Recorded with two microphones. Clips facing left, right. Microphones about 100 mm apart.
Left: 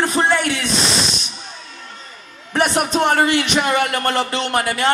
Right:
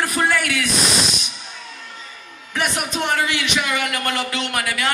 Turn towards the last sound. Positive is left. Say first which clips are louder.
# left 5 dB
turn(degrees=35)  # may be behind; listen again after turning